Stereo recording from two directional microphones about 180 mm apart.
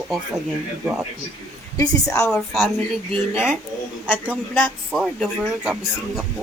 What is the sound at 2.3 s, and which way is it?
Speech, centre (ahead or behind).